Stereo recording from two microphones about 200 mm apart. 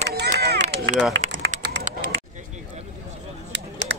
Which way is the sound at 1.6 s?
60° right (ahead or behind).